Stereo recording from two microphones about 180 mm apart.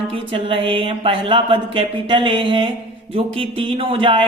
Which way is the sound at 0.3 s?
30° right (ahead or behind).